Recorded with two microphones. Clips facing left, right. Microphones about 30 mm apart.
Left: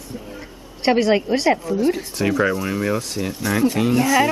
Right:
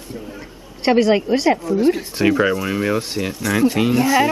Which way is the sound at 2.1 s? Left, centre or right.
Right.